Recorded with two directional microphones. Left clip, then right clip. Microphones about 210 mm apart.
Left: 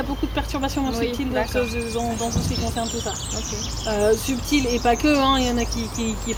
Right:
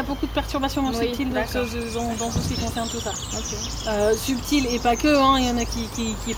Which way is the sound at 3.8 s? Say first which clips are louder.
Left 1 dB; 15° right (ahead or behind).